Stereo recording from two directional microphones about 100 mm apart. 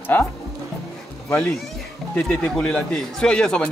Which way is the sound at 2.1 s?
10° left (ahead or behind).